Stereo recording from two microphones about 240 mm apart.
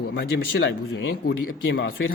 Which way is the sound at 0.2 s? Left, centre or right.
Left.